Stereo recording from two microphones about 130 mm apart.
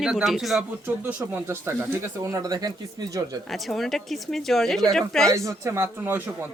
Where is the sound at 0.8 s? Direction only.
20° right (ahead or behind).